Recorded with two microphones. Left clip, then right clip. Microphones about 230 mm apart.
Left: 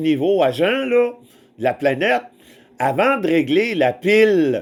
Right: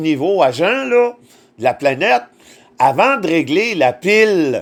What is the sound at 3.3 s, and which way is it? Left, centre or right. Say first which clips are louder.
Speech: right 2 dB; right.